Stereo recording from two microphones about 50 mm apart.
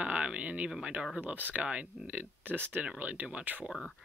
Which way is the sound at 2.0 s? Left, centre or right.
Right.